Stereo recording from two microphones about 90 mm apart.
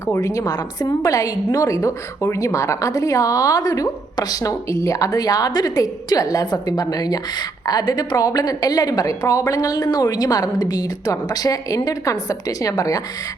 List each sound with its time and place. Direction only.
0.0 s a woman's voice: 35° left (ahead or behind)